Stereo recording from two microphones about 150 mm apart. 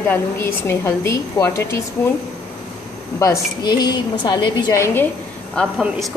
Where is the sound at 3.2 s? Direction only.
25° left (ahead or behind).